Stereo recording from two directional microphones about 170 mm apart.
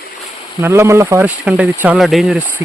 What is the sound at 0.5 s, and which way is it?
Speech, 15° right (ahead or behind).